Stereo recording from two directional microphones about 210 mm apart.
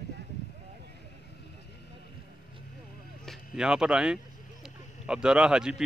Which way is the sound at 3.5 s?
5° right (ahead or behind).